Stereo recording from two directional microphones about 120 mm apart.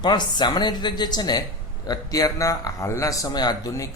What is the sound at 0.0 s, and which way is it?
Speech, 40° left (ahead or behind).